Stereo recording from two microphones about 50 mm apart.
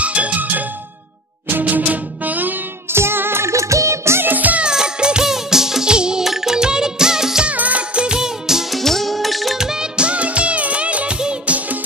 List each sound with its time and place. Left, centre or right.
0.0 s music: right
2.9 s music: right
3.5 s music: right
4.2 s music: right
4.6 s music: centre
7.4 s music: right; by 8.6 s centre
8.7 s music: centre
9.6 s music: centre